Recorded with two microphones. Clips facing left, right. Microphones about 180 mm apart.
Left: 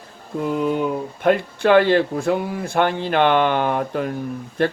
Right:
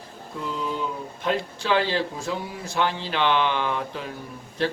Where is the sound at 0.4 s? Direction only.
60° left (ahead or behind).